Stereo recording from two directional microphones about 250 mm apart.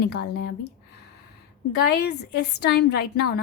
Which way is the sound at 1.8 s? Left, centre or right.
Left.